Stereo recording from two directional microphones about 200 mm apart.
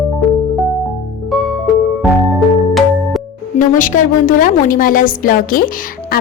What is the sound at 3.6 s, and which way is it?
A woman's voice, 40° left (ahead or behind).